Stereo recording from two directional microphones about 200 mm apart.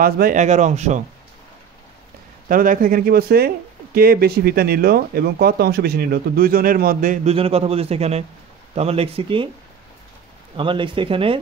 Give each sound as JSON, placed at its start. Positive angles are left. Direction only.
{"t": 0.0, "sound": "speech", "side_deg": -45}
{"t": 2.4, "sound": "speech", "side_deg": -45}
{"t": 7.3, "sound": "a man's voice", "side_deg": -30}
{"t": 10.5, "sound": "a man's voice", "side_deg": -25}